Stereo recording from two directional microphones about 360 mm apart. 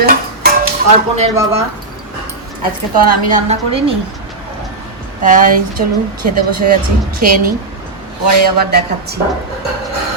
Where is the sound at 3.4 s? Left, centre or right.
Centre.